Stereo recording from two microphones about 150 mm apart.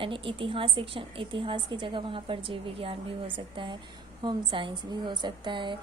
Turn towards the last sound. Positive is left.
turn(degrees=-30)  # may be behind; listen again after turning